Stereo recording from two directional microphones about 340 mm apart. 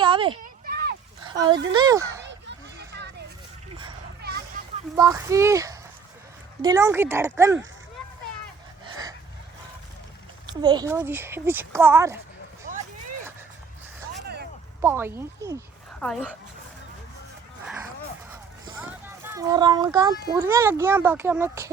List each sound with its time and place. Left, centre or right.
0.0 s a sound: centre
0.7 s a sound: right
1.2 s speech: centre
2.2 s a sound: right
4.9 s speech: centre
10.4 s speech: centre
12.7 s vehicle: right
14.8 s speech: centre
18.6 s speech: centre